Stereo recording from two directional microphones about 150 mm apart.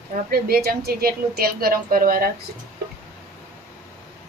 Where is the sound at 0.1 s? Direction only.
80° right.